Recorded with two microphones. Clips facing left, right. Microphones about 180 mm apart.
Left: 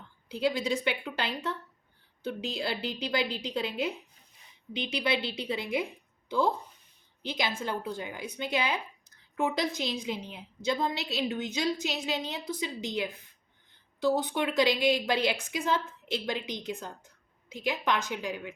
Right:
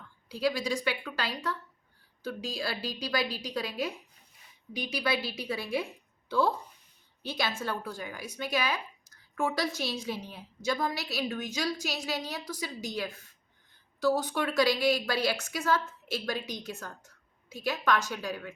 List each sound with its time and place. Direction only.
0.3 s a woman's voice: 25° left (ahead or behind)